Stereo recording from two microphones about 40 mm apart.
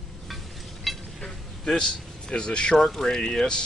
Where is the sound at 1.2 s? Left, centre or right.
Centre.